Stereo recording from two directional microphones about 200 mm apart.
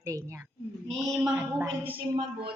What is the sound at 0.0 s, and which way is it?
Speech, 15° right (ahead or behind).